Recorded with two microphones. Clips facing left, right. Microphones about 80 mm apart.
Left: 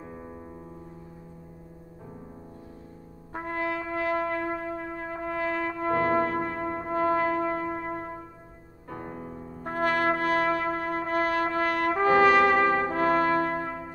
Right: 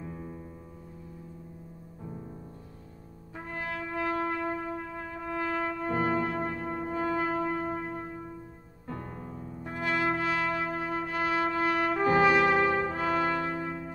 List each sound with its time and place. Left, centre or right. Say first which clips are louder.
0.0 s music: even; left
3.3 s brass instrument: left 7 dB; left
4.2 s music: left 2 dB; left
5.5 s brass instrument: left 3 dB; left
8.8 s music: left 2 dB; left
9.6 s brass instrument: left 5 dB; left